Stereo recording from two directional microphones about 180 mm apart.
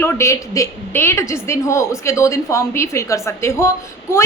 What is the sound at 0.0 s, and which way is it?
A woman's voice, 15° left (ahead or behind).